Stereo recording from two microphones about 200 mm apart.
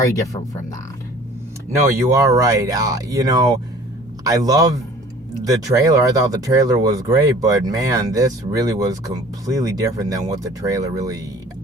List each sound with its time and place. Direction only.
0.0 s speech: 15° left (ahead or behind)
2.1 s speech: 15° right (ahead or behind)